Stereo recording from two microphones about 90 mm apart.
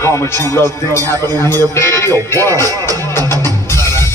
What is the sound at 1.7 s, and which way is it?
Music, 30° left (ahead or behind).